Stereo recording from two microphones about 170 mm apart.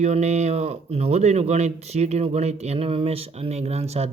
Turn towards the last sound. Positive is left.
turn(degrees=-40)  # may be behind; listen again after turning